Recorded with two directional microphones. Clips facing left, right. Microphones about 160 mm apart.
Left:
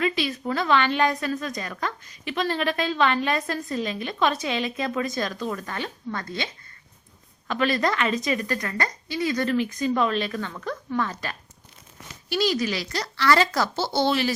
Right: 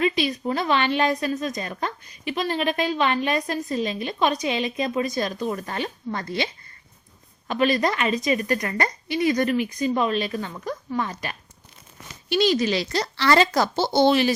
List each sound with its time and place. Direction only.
0.0 s a woman's voice: 20° right (ahead or behind)